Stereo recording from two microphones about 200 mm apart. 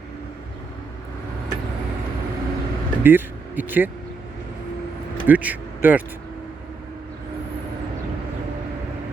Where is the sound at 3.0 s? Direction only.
10° right (ahead or behind).